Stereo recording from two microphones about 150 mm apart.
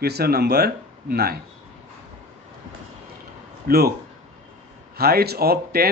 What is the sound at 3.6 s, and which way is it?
Speech, 90° right.